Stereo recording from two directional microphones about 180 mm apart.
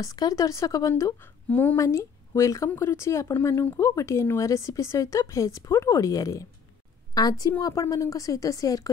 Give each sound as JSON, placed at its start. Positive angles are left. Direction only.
{"t": 0.0, "sound": "a woman's voice", "side_deg": 20}